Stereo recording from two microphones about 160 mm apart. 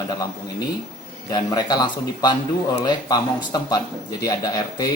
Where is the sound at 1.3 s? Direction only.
25° left (ahead or behind).